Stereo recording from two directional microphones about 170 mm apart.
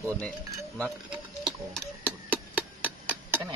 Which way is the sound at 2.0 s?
10° right (ahead or behind).